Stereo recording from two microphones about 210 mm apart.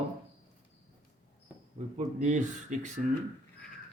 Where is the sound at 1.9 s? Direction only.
35° right (ahead or behind).